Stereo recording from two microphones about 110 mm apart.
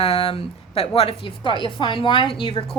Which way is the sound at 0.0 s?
60° left (ahead or behind).